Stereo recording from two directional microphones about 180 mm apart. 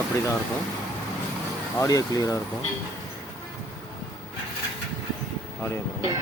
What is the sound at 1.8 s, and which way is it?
Speech, 20° left (ahead or behind).